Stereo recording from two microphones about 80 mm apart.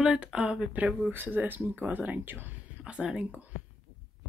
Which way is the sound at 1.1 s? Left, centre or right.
Right.